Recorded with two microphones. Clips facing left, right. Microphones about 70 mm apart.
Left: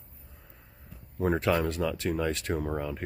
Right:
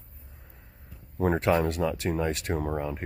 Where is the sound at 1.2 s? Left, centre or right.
Right.